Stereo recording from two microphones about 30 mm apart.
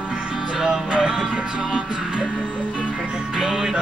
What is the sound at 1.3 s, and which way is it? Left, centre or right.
Music, right.